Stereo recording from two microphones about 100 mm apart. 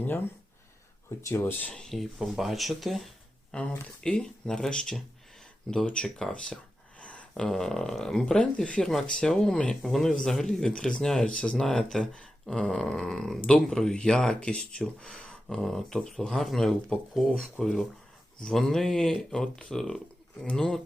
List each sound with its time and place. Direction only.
1.2 s speech: 25° left (ahead or behind)
1.7 s speech: 5° left (ahead or behind)
3.5 s speech: 10° left (ahead or behind)